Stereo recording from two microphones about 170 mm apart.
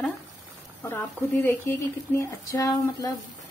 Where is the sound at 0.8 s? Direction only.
10° left (ahead or behind).